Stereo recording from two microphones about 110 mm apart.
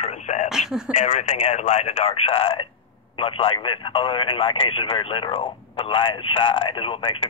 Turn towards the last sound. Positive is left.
turn(degrees=55)  # may be behind; listen again after turning